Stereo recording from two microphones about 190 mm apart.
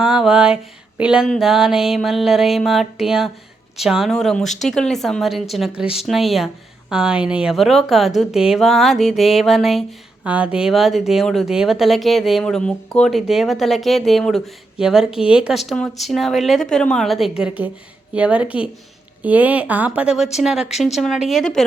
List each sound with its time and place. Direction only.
0.0 s a woman's voice: 5° right (ahead or behind)